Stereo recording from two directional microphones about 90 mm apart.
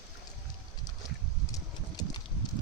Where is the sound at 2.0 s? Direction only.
45° left (ahead or behind).